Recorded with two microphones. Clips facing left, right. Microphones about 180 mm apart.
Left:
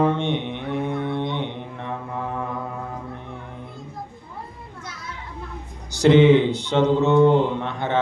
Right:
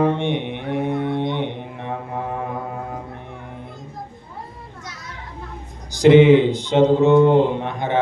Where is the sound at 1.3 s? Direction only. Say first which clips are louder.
Right 3 dB; 15° right (ahead or behind).